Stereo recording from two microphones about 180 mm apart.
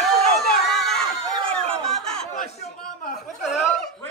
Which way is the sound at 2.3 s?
40° left (ahead or behind).